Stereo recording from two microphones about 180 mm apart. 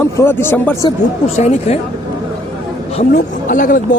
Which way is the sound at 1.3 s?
40° left (ahead or behind).